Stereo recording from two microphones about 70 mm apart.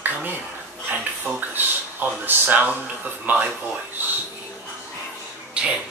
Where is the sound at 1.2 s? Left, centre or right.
Right.